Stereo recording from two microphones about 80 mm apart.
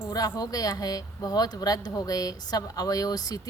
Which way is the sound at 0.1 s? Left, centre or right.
Left.